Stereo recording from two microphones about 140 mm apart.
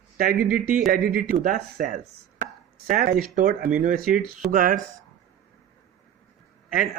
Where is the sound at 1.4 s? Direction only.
70° right (ahead or behind).